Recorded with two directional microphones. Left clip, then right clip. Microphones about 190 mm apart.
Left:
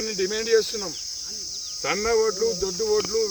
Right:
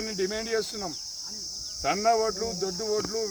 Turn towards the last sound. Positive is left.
turn(degrees=-15)  # may be behind; listen again after turning